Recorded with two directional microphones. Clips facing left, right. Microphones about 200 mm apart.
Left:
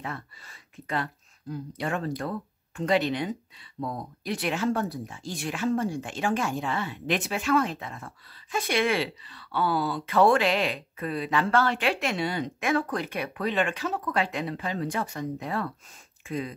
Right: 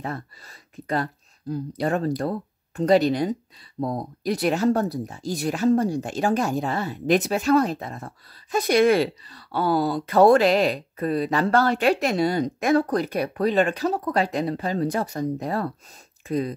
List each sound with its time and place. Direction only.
0.0 s speech: 40° right (ahead or behind)